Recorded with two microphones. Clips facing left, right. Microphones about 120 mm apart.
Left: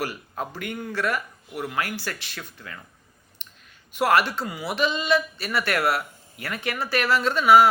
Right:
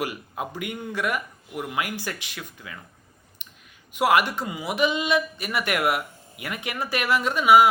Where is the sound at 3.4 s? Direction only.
10° right (ahead or behind).